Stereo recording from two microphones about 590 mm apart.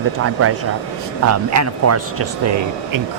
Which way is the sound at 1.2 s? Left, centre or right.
Right.